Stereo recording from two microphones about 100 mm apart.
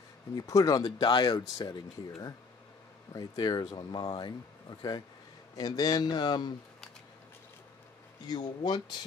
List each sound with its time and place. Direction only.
0.5 s speech: 35° left (ahead or behind)
3.1 s speech: 40° left (ahead or behind)
8.3 s speech: 45° left (ahead or behind)